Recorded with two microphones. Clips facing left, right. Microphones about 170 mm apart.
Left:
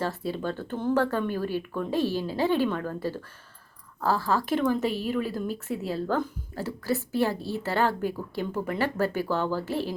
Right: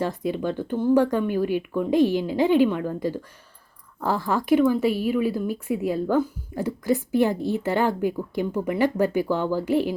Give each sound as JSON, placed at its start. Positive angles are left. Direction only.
{"t": 0.0, "sound": "speech", "side_deg": -15}